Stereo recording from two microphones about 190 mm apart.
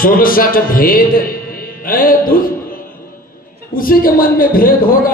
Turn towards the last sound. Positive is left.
turn(degrees=50)  # may be behind; listen again after turning